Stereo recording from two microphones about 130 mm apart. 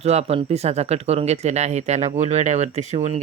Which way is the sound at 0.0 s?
55° right (ahead or behind).